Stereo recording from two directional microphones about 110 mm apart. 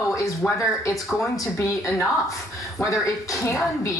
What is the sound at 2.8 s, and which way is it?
Speech, 30° left (ahead or behind).